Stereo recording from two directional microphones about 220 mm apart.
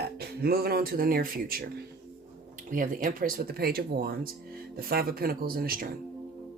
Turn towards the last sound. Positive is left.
turn(degrees=-40)  # may be behind; listen again after turning